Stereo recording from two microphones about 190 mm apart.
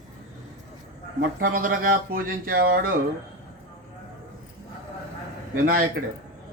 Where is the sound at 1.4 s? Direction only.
45° right (ahead or behind).